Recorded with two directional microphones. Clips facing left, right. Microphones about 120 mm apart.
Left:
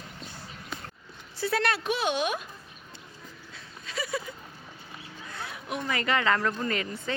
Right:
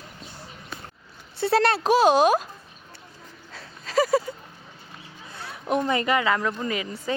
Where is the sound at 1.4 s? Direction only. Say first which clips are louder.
Right 7 dB; 30° right (ahead or behind).